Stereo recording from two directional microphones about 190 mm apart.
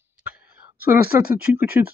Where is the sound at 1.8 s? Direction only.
15° right (ahead or behind).